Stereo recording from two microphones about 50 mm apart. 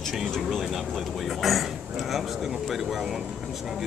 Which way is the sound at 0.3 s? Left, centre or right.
Centre.